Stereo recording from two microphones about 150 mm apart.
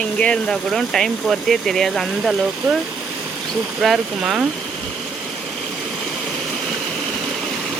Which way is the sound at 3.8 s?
Centre (ahead or behind).